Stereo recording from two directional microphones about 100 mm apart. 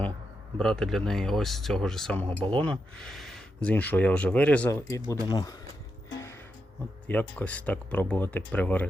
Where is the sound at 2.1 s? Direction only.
15° left (ahead or behind).